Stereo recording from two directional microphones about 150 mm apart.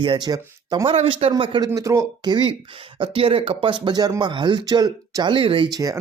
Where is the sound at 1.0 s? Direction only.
35° right (ahead or behind).